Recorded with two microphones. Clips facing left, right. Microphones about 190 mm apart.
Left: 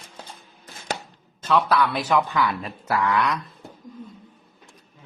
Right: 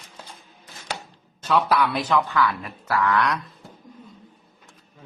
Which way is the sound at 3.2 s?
Centre (ahead or behind).